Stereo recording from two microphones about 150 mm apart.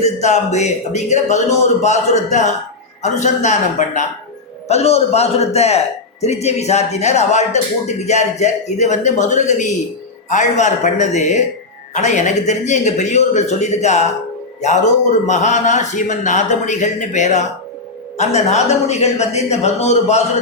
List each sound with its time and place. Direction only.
0.0 s speech: 50° left (ahead or behind)